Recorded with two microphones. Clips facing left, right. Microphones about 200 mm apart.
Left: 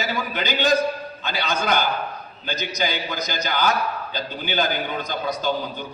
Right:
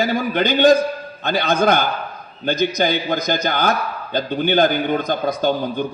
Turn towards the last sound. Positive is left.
turn(degrees=-55)  # may be behind; listen again after turning